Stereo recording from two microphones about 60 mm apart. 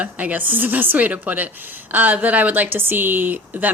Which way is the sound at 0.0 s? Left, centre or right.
Right.